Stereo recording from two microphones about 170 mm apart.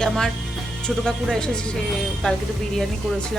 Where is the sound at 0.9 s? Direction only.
5° left (ahead or behind).